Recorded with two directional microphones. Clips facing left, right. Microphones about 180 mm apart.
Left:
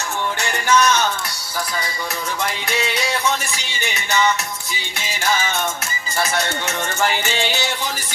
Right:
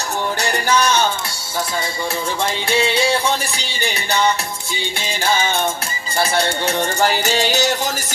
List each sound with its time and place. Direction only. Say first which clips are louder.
0.4 s music: left 1 dB; 30° right (ahead or behind)
2.4 s music: right 5 dB; 30° right (ahead or behind)